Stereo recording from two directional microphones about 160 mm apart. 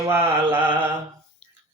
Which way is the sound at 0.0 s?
15° right (ahead or behind).